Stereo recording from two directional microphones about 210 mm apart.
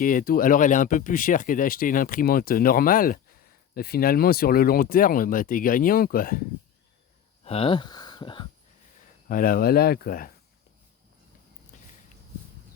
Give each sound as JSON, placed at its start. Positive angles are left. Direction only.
{"t": 0.0, "sound": "speech", "side_deg": 40}
{"t": 7.4, "sound": "speech", "side_deg": 30}
{"t": 9.3, "sound": "speech", "side_deg": 40}